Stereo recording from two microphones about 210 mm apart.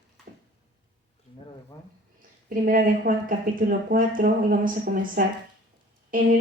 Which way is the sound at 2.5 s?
40° right (ahead or behind).